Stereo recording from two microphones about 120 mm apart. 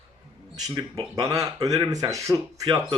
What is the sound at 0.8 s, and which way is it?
Speech, 40° right (ahead or behind).